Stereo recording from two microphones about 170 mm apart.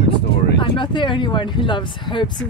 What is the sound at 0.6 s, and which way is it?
Speech, 30° left (ahead or behind).